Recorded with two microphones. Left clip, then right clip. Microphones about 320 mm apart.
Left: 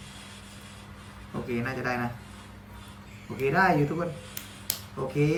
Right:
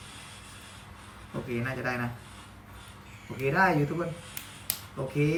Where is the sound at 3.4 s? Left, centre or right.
Centre.